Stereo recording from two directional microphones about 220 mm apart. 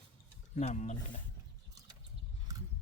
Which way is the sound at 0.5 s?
30° left (ahead or behind).